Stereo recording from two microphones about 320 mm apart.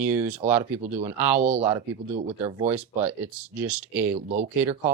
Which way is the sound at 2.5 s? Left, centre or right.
Centre.